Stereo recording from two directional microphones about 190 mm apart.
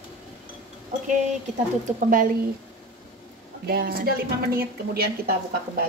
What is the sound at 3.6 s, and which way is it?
Speech, 50° right (ahead or behind).